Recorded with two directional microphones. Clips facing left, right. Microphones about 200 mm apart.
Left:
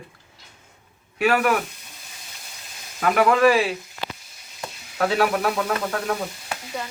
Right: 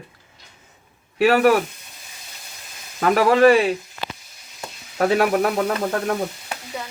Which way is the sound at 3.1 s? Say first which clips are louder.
Right 3 dB; 35° right (ahead or behind).